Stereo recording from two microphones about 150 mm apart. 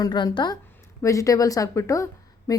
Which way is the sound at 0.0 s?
25° left (ahead or behind).